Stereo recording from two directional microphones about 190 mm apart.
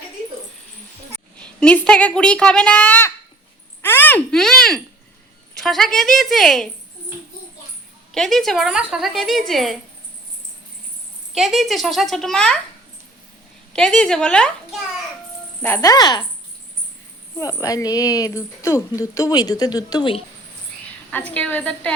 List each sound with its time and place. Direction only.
1.4 s a woman's voice: 5° left (ahead or behind)
3.8 s a sound: 10° left (ahead or behind)
5.5 s a woman's voice: centre (ahead or behind)
8.1 s a woman's voice: centre (ahead or behind)
11.3 s a woman's voice: centre (ahead or behind)
13.7 s a woman's voice: 5° left (ahead or behind)
15.6 s speech: 15° left (ahead or behind)
17.3 s speech: 15° left (ahead or behind)
21.1 s speech: 10° left (ahead or behind)